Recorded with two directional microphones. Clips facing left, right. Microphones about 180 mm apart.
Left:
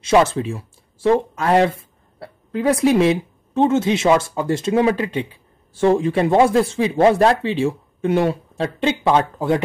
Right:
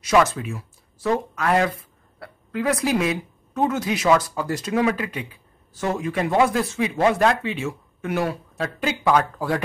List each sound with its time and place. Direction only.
0.0 s speech: 25° left (ahead or behind)